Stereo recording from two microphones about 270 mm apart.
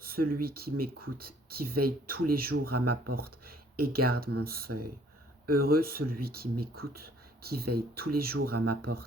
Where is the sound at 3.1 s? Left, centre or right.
Right.